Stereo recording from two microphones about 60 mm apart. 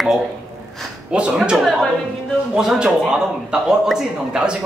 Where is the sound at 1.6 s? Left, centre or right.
Centre.